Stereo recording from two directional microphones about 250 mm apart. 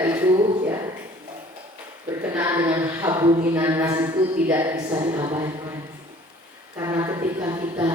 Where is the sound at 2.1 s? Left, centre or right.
Centre.